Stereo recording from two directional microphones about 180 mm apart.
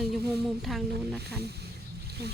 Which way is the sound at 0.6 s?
Centre (ahead or behind).